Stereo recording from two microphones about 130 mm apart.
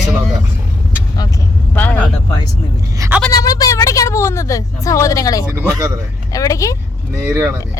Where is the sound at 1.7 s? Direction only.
15° left (ahead or behind).